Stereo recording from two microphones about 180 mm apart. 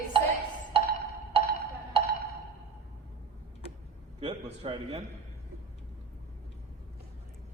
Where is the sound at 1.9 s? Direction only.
30° right (ahead or behind).